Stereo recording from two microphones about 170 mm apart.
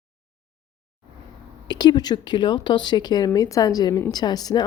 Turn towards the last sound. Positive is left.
turn(degrees=25)  # may be behind; listen again after turning